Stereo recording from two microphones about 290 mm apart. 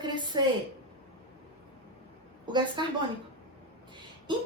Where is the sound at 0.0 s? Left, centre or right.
Centre.